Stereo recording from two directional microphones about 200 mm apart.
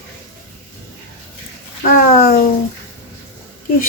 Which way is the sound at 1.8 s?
50° left (ahead or behind).